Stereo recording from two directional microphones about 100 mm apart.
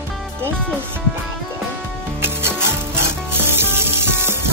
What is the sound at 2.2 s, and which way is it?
Music, 25° right (ahead or behind).